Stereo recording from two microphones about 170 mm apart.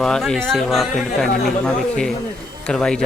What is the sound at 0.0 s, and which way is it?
Speech, 5° left (ahead or behind).